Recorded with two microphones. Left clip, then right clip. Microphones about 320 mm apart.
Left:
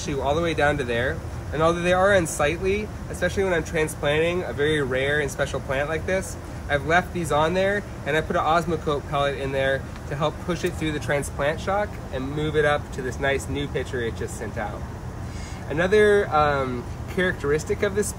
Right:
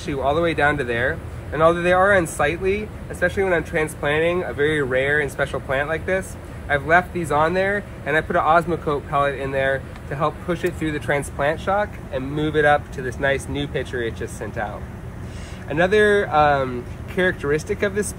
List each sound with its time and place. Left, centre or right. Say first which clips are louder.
0.0 s speech: right 4 dB; centre
15.7 s speech: right 2 dB; centre